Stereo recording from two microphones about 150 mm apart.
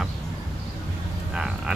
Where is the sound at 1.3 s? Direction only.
5° right (ahead or behind).